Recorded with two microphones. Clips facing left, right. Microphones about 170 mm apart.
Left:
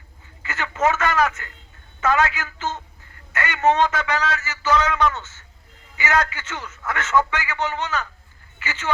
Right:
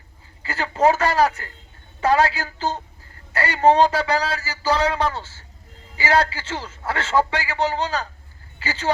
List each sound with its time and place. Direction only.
0.4 s a man's voice: 35° right (ahead or behind)